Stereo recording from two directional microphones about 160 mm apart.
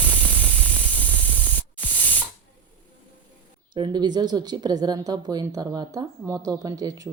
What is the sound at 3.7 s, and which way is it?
Speech, 25° right (ahead or behind).